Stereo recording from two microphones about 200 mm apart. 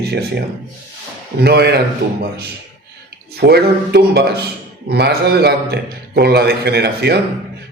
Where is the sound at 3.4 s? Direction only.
55° right (ahead or behind).